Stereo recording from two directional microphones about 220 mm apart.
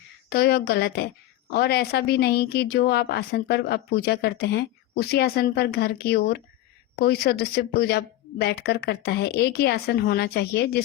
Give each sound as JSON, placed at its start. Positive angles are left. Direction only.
{"t": 0.3, "sound": "speech", "side_deg": 45}